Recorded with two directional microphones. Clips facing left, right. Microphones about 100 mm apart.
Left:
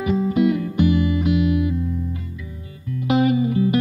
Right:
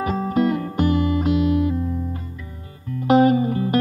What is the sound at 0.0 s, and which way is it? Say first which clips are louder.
Music: left 2 dB; 40° right (ahead or behind).